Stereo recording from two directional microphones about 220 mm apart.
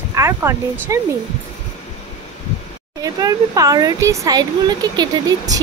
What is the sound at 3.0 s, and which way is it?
Speech, 15° right (ahead or behind).